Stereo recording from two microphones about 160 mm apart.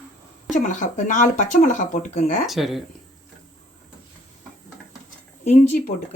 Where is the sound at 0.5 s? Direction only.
50° left (ahead or behind).